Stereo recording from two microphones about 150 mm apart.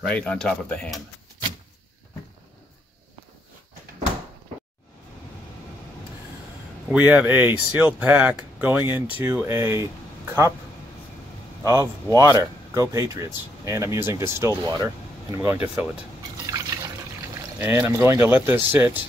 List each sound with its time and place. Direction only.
0.0 s speech: 5° left (ahead or behind)
6.9 s speech: 10° right (ahead or behind)
11.6 s speech: 20° right (ahead or behind)
15.3 s speech: 10° right (ahead or behind)
16.4 s liquid: 25° right (ahead or behind)
17.6 s speech: 15° right (ahead or behind)